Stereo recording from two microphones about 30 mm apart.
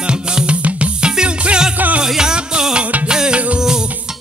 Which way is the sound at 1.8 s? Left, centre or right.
Right.